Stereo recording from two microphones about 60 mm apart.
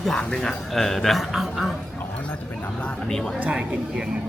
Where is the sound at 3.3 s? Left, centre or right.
Right.